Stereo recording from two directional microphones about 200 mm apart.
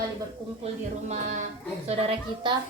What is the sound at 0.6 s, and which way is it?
A woman's voice, 35° right (ahead or behind).